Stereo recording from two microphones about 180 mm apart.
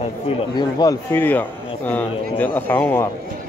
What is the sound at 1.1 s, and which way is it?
Speech, 10° left (ahead or behind).